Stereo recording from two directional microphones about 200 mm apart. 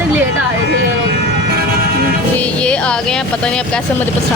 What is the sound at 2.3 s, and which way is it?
Speech, 5° left (ahead or behind).